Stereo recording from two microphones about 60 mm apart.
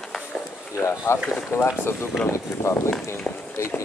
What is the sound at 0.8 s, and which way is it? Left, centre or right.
Speech, left.